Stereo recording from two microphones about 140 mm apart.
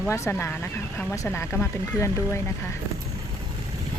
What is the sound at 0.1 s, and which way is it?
Speech, 20° left (ahead or behind).